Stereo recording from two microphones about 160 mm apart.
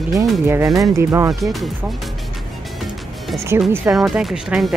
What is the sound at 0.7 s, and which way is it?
Speech, 20° right (ahead or behind).